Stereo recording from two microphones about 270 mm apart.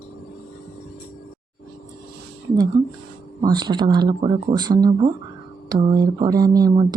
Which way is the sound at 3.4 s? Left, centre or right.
Centre.